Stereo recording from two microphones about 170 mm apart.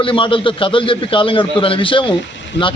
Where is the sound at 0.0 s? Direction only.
30° left (ahead or behind).